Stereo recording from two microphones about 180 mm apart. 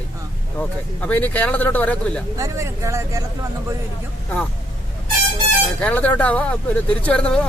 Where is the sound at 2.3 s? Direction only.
15° right (ahead or behind).